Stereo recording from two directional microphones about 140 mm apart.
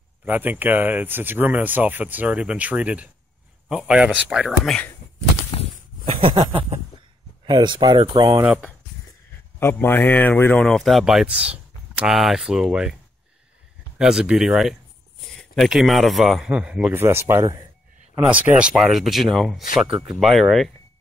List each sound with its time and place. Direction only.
0.2 s speech: 10° right (ahead or behind)
5.5 s a sound: 40° left (ahead or behind)
6.0 s a sound: 40° right (ahead or behind)
7.4 s speech: 35° right (ahead or behind)
9.6 s speech: 15° left (ahead or behind); by 12.9 s 5° right (ahead or behind)
13.9 s speech: 5° right (ahead or behind); by 17.6 s 20° right (ahead or behind)
18.2 s speech: 10° right (ahead or behind)